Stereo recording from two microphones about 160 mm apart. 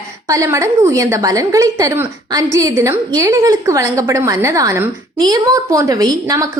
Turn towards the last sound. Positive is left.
turn(degrees=-20)  # may be behind; listen again after turning